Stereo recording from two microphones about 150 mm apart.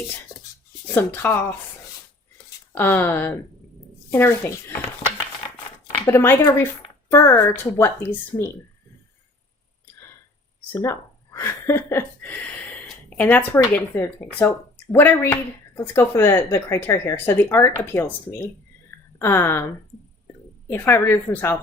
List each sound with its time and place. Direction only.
0.9 s speech: 10° left (ahead or behind)
2.7 s speech: 15° left (ahead or behind)
10.7 s speech: 20° left (ahead or behind)